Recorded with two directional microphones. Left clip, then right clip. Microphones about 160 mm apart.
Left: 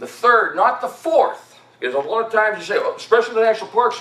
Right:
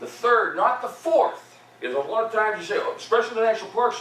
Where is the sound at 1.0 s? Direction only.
30° left (ahead or behind).